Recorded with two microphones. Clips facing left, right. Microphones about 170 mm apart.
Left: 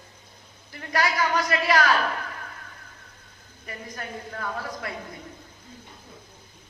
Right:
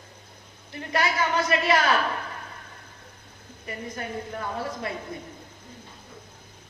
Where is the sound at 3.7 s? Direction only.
25° right (ahead or behind).